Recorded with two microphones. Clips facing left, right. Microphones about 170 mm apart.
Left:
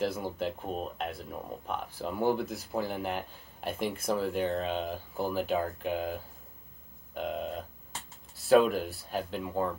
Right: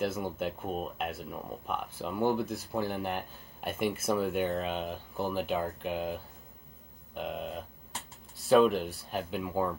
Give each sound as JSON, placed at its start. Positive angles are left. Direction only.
{"t": 0.0, "sound": "speech", "side_deg": 0}